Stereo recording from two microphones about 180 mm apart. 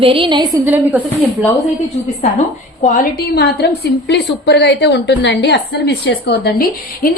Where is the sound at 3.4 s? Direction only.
65° left (ahead or behind).